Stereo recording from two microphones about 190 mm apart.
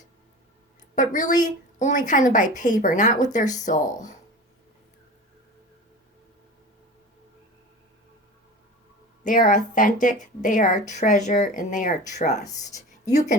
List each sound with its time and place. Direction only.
0.9 s a woman's voice: 40° left (ahead or behind)
9.2 s a woman's voice: 45° left (ahead or behind)